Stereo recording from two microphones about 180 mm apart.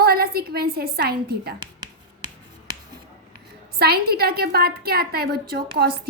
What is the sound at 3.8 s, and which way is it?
A woman's voice, 60° right (ahead or behind).